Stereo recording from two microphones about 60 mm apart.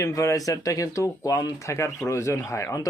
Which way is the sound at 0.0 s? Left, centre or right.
Left.